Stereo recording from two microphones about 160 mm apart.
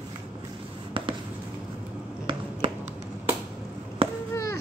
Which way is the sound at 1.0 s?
35° right (ahead or behind).